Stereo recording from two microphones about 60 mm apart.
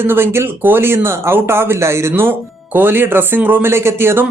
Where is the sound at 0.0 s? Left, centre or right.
Right.